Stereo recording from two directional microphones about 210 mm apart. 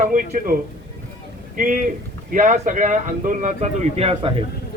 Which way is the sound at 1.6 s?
40° right (ahead or behind).